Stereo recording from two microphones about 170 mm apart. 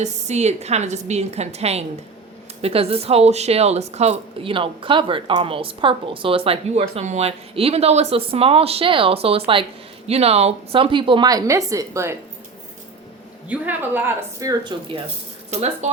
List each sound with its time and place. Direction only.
0.0 s a woman's voice: 40° right (ahead or behind); by 12.1 s 20° right (ahead or behind)
13.5 s speech: 10° right (ahead or behind); by 15.0 s 30° right (ahead or behind)
15.4 s speech: 40° right (ahead or behind)